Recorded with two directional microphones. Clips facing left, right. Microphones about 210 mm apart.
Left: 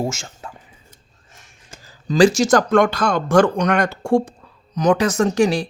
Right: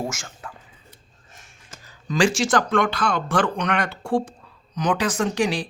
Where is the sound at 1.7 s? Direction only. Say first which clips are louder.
Left 5 dB; 30° left (ahead or behind).